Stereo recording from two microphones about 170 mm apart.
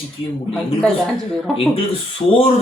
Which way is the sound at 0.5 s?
Centre (ahead or behind).